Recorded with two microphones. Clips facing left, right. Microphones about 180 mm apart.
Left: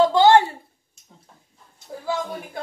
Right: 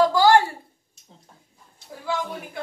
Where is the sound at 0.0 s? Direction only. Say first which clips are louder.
Left 2 dB; 25° left (ahead or behind).